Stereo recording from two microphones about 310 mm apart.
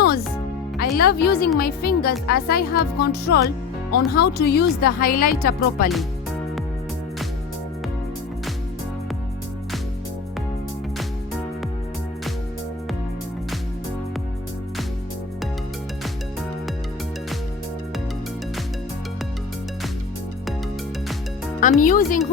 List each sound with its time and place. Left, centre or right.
0.8 s speech: left
21.8 s speech: left